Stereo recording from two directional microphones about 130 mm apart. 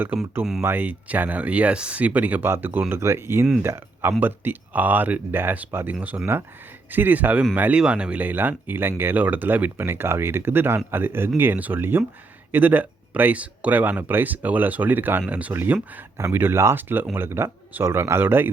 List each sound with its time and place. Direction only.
0.6 s speech: 15° right (ahead or behind)